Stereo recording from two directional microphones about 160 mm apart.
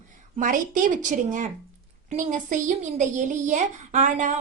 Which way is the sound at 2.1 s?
50° right (ahead or behind).